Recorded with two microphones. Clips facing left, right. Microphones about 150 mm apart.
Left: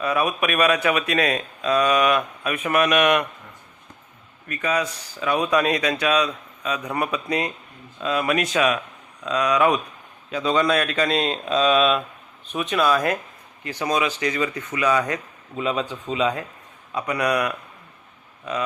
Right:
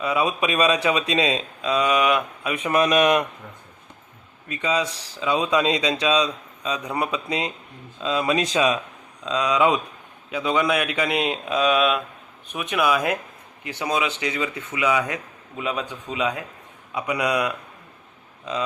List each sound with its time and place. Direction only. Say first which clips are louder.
0.0 s a man's voice: even; 20° right (ahead or behind)
2.7 s a man's voice: right 1 dB; 30° right (ahead or behind)
4.4 s a man's voice: even; 20° right (ahead or behind); by 16.5 s 5° right (ahead or behind)
16.9 s a man's voice: left 1 dB; 15° right (ahead or behind)